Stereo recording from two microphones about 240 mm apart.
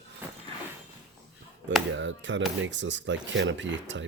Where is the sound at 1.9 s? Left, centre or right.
Right.